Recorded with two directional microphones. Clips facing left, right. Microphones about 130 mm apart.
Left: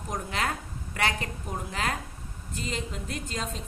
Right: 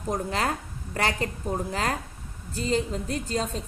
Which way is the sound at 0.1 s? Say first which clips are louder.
Right 4 dB; 35° right (ahead or behind).